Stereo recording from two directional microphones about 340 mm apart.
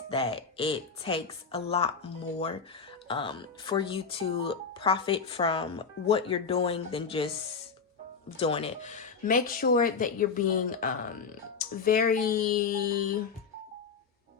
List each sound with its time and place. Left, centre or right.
0.1 s speech: centre
8.4 s speech: centre